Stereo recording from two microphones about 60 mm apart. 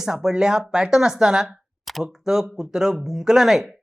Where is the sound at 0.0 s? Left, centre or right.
Centre.